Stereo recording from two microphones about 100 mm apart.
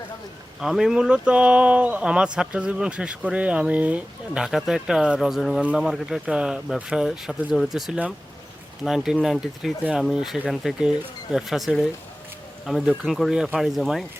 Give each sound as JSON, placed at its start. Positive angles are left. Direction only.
{"t": 0.6, "sound": "speech", "side_deg": -5}